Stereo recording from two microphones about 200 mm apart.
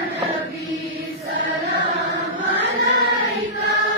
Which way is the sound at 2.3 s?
65° right (ahead or behind).